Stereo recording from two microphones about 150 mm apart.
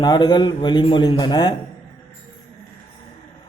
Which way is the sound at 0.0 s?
30° left (ahead or behind).